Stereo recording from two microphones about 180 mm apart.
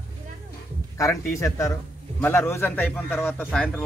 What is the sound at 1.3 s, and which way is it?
A man's voice, 15° left (ahead or behind).